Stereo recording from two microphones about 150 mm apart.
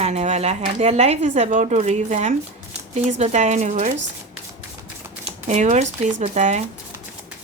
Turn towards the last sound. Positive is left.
turn(degrees=-50)  # may be behind; listen again after turning